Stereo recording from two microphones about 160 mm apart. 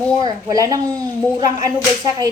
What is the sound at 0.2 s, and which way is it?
Speech, 25° right (ahead or behind).